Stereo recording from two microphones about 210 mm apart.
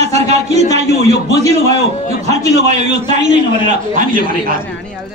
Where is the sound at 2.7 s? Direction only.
35° right (ahead or behind).